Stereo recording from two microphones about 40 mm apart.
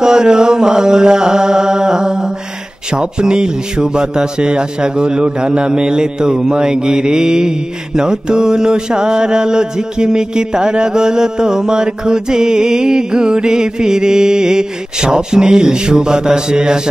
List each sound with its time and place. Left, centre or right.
0.0 s music: centre
2.9 s a man's voice: right